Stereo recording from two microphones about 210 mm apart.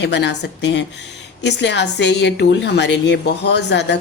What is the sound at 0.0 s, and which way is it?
A woman's voice, 55° left (ahead or behind).